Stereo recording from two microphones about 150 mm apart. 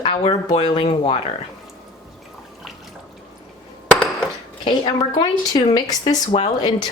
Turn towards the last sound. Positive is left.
turn(degrees=30)  # may be behind; listen again after turning